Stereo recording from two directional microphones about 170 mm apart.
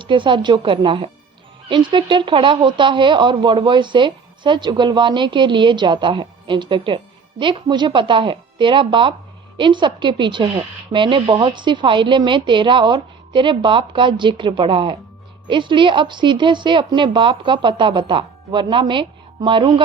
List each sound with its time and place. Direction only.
0.0 s speech: 30° right (ahead or behind)